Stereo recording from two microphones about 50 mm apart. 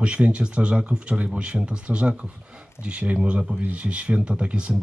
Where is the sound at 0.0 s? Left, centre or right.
Right.